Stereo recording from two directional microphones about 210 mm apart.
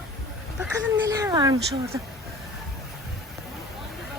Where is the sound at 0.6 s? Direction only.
10° right (ahead or behind).